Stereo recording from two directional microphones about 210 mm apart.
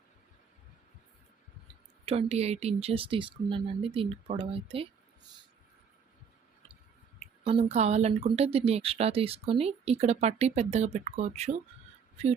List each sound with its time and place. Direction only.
2.0 s speech: 30° right (ahead or behind)
7.2 s speech: 30° right (ahead or behind)